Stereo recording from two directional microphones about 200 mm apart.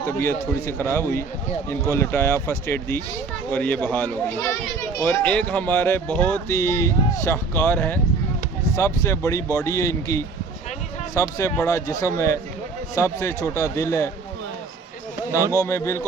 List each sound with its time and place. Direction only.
0.0 s speech: 10° left (ahead or behind)
15.5 s speech: 15° left (ahead or behind)